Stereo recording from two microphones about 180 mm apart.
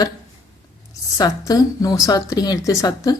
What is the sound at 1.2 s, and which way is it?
Speech, 20° left (ahead or behind).